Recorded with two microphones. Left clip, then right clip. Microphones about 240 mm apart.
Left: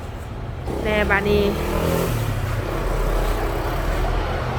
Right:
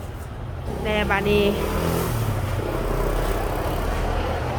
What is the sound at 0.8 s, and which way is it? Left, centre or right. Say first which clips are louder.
Speech: left 3 dB; centre.